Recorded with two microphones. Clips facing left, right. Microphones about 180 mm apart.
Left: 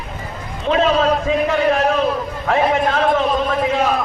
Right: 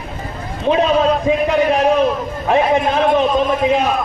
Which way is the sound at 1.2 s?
15° right (ahead or behind).